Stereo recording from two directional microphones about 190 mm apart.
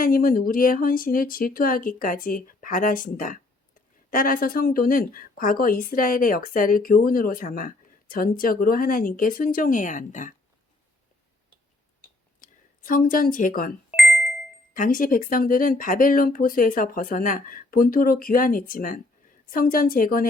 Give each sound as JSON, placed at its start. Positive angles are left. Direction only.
{"t": 0.0, "sound": "a woman's voice", "side_deg": 50}
{"t": 12.4, "sound": "speech", "side_deg": 45}
{"t": 13.9, "sound": "doorbell", "side_deg": 0}
{"t": 14.7, "sound": "a woman's voice", "side_deg": 45}